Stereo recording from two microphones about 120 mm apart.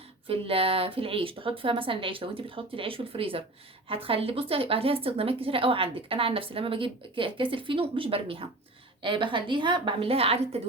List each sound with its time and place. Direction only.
0.3 s a woman's voice: 50° right (ahead or behind)